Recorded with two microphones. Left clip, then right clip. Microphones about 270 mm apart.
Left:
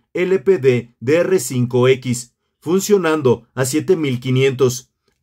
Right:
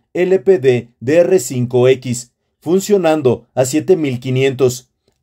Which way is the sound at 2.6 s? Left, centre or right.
Centre.